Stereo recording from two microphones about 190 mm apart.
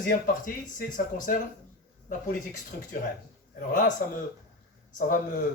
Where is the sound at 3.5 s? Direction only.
45° left (ahead or behind).